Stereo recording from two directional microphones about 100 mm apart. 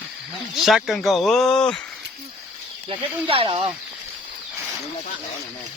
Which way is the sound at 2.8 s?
65° right (ahead or behind).